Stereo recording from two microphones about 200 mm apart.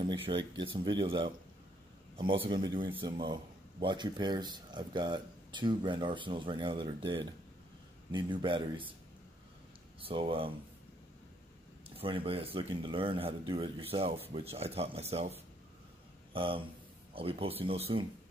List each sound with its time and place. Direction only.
0.0 s speech: 25° right (ahead or behind)
9.9 s speech: 25° right (ahead or behind)
12.0 s speech: 25° right (ahead or behind)